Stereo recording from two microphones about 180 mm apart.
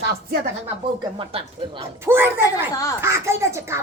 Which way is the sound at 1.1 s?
30° right (ahead or behind).